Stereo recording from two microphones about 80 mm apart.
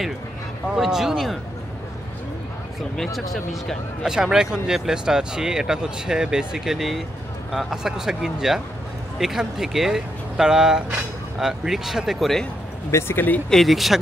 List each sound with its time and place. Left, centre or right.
0.7 s speech: centre
3.0 s speech: centre
12.9 s speech: left
13.5 s speech: centre